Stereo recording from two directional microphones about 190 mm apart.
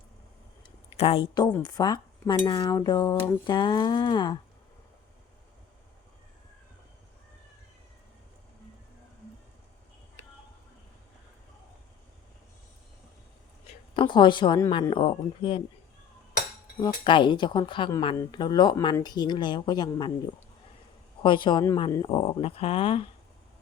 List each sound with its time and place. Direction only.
0.9 s speech: 30° left (ahead or behind)
1.6 s cutlery: 20° left (ahead or behind)
13.9 s cutlery: 25° left (ahead or behind)
17.0 s cutlery: 25° left (ahead or behind)
21.2 s cutlery: 25° left (ahead or behind)